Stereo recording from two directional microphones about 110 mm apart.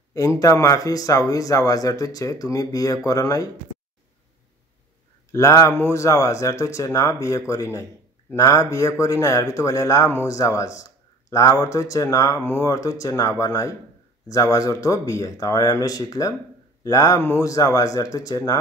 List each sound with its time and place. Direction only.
0.1 s speech: 30° left (ahead or behind)
5.3 s speech: 25° left (ahead or behind)